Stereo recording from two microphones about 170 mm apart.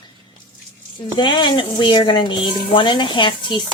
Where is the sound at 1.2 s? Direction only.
30° left (ahead or behind).